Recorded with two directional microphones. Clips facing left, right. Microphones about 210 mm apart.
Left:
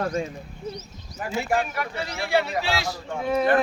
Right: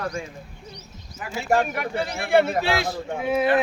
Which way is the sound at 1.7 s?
55° right (ahead or behind).